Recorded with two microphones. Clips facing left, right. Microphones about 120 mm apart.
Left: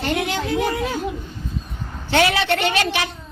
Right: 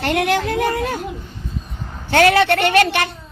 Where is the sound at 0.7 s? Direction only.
45° right (ahead or behind).